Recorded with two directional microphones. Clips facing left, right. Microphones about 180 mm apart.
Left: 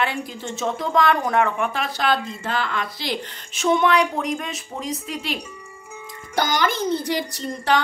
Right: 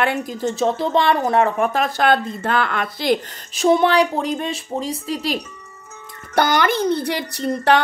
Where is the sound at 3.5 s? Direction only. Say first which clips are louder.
Right 4 dB; 35° right (ahead or behind).